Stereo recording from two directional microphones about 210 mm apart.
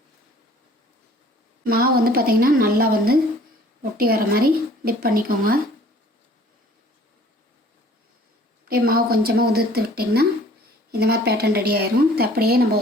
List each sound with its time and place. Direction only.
1.6 s a woman's voice: 45° right (ahead or behind)
8.6 s a woman's voice: 45° right (ahead or behind)